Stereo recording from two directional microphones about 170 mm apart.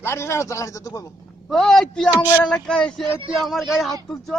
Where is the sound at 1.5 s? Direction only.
Centre (ahead or behind).